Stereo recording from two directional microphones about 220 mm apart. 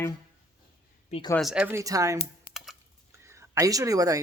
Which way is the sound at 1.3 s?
Centre (ahead or behind).